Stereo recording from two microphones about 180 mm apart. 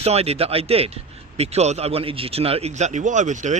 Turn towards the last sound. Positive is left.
turn(degrees=-45)  # may be behind; listen again after turning